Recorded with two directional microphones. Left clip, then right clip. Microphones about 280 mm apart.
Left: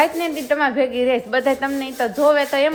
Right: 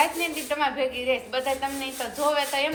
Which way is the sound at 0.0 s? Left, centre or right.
Left.